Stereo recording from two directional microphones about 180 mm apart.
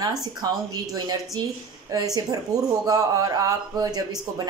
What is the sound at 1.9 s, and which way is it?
Speech, 20° right (ahead or behind).